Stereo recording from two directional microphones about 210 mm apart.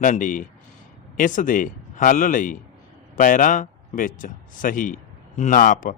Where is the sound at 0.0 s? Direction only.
40° left (ahead or behind).